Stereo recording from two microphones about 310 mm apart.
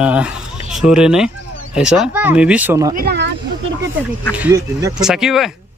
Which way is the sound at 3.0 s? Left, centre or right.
Right.